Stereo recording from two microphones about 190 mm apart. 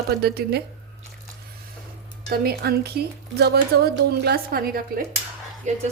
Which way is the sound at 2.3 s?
55° right (ahead or behind).